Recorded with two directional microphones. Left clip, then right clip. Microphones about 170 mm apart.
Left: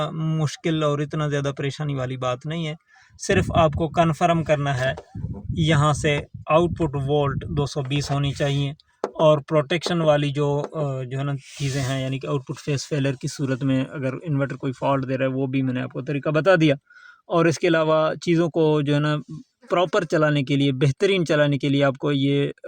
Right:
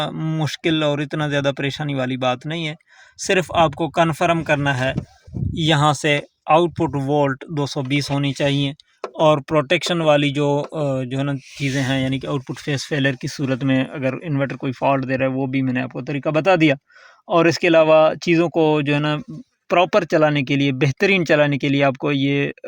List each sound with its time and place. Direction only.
0.0 s speech: 40° right (ahead or behind)